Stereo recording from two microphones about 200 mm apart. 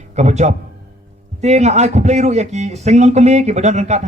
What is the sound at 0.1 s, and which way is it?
A man's voice, 35° right (ahead or behind).